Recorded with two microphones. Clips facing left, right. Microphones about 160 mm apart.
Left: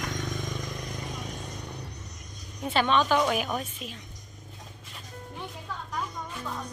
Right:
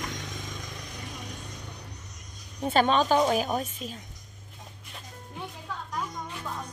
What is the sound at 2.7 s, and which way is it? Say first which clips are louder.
A woman's voice: right 1 dB; 40° right (ahead or behind).